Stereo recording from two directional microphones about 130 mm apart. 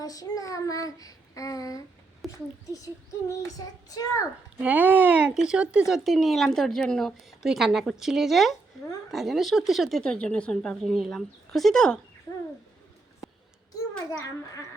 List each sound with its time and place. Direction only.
0.0 s child singing: 30° left (ahead or behind)
2.2 s a child's voice: centre (ahead or behind)
2.6 s a child's voice: 25° left (ahead or behind)
4.6 s speech: 10° right (ahead or behind); by 11.9 s 5° left (ahead or behind)
14.1 s a child's voice: 25° left (ahead or behind)